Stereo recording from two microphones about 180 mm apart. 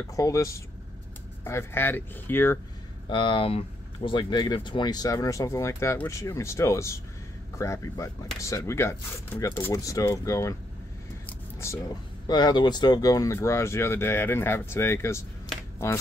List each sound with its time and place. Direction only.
0.1 s speech: 15° left (ahead or behind)
3.1 s speech: 25° left (ahead or behind)
11.2 s vehicle: 15° left (ahead or behind)
12.3 s speech: 25° left (ahead or behind)